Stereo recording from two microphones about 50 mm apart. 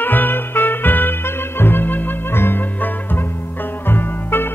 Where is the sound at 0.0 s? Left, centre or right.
Left.